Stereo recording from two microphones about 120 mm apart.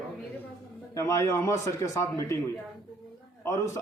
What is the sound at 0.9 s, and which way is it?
A man's voice, 25° left (ahead or behind).